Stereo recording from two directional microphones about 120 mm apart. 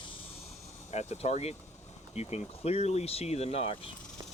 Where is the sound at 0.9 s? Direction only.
70° left (ahead or behind).